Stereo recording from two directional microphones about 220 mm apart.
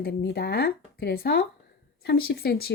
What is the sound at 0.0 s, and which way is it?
Speech, 45° left (ahead or behind).